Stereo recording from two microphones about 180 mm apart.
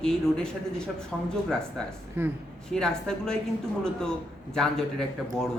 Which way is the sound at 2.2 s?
10° right (ahead or behind).